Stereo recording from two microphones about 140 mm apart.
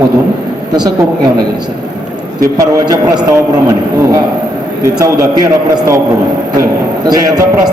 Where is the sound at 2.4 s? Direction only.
25° right (ahead or behind).